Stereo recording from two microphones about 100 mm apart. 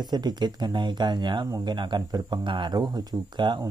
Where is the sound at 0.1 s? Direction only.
45° right (ahead or behind).